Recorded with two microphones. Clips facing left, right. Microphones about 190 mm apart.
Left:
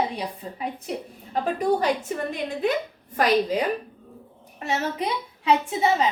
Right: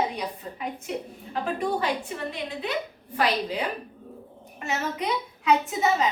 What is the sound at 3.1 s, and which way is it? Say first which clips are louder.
Speech: left 5 dB; 45° left (ahead or behind).